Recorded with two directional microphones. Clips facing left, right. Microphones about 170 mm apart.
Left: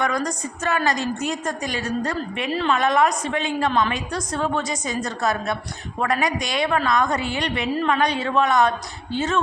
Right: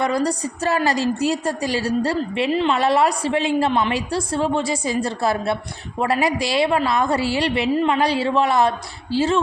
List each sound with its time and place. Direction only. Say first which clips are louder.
0.0 s a woman's voice: right 4 dB; 30° right (ahead or behind)
3.7 s a woman's voice: right 2 dB; 20° right (ahead or behind)